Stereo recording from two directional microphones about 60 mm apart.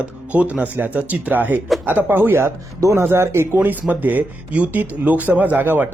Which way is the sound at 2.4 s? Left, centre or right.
Right.